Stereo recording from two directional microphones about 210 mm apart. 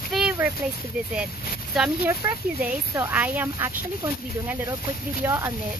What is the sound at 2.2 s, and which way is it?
Speech, 15° right (ahead or behind).